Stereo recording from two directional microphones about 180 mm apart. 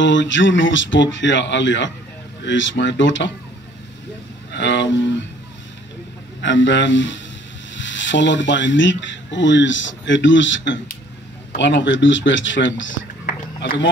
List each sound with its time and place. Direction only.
0.0 s speech: 90° left
4.6 s speech: 90° left
6.4 s speech: 90° left
13.6 s a man's voice: 80° left